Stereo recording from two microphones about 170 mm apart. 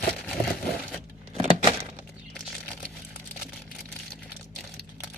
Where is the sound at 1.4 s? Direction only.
30° right (ahead or behind).